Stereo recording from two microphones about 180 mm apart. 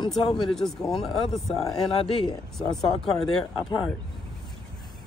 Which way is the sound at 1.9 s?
30° left (ahead or behind).